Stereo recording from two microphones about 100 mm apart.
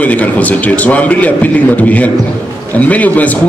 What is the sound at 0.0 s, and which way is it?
A man's voice, 15° left (ahead or behind).